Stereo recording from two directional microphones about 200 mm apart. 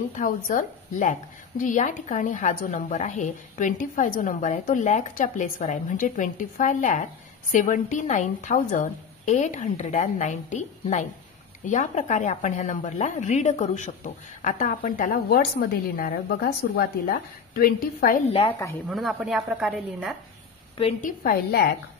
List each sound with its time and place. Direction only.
0.1 s a woman's voice: 40° left (ahead or behind)
18.9 s a woman's voice: centre (ahead or behind)
21.0 s a woman's voice: 45° left (ahead or behind)